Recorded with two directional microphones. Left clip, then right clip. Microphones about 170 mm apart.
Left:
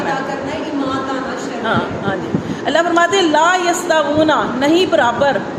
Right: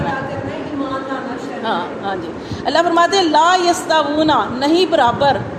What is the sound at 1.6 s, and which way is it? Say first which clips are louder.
A man's voice: left 2 dB; 40° right (ahead or behind).